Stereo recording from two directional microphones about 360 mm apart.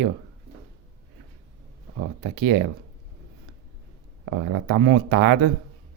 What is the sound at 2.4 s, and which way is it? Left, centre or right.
Speech, right.